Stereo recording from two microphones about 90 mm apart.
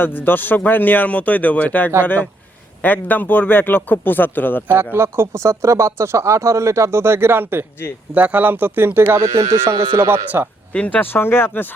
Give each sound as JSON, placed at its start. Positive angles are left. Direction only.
{"t": 0.3, "sound": "a man's voice", "side_deg": 20}
{"t": 4.7, "sound": "speech", "side_deg": -25}
{"t": 10.7, "sound": "a man's voice", "side_deg": 15}